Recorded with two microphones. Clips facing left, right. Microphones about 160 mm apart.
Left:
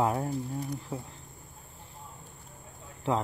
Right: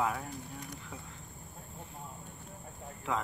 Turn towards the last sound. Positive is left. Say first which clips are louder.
# left 6 dB
turn(degrees=30)  # may be behind; listen again after turning